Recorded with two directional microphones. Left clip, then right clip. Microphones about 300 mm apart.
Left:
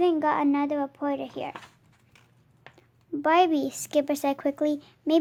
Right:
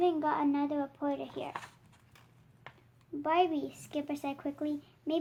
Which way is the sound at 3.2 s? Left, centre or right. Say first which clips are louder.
Left 8 dB; left.